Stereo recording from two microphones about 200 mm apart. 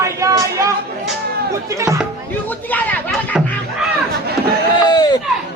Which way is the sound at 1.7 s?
15° right (ahead or behind).